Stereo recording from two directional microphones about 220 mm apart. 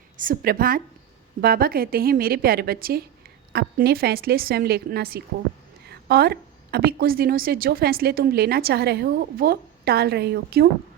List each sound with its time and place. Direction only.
0.2 s a woman's voice: 40° right (ahead or behind)